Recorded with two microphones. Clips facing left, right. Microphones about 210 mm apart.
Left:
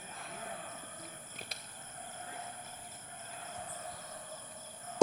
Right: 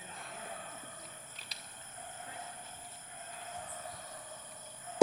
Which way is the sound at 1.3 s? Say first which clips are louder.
Left 6 dB; 50° left (ahead or behind).